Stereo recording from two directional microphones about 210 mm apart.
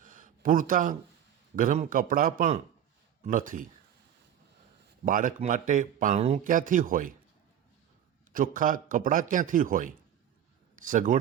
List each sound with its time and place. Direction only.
0.0 s a sound: 40° right (ahead or behind)
1.5 s speech: 35° right (ahead or behind)
5.0 s speech: 40° right (ahead or behind)
8.3 s speech: 40° right (ahead or behind)